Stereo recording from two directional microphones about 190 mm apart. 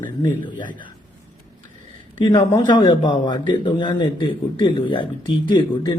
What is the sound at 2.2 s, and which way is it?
A man's voice, 25° left (ahead or behind).